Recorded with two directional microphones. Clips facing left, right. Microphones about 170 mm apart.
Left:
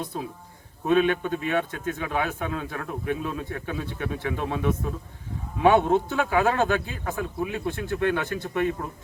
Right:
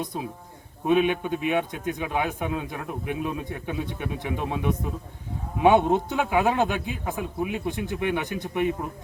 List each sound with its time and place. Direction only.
0.9 s a man's voice: 15° right (ahead or behind)